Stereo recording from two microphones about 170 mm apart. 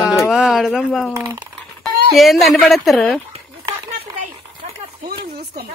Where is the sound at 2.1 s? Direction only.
Centre (ahead or behind).